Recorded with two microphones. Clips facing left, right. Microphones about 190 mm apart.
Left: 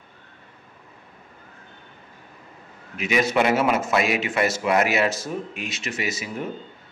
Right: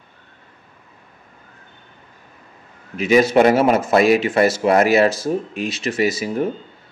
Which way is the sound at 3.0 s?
35° right (ahead or behind).